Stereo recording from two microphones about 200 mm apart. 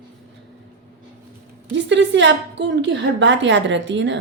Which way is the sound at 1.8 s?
60° right (ahead or behind).